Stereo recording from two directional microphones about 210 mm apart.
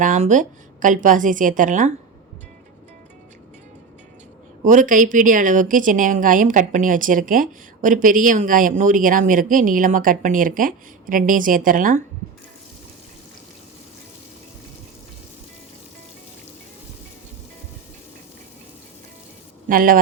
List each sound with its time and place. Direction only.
0.0 s a woman's voice: 35° right (ahead or behind)
4.6 s a woman's voice: 40° right (ahead or behind)
19.6 s speech: 40° right (ahead or behind)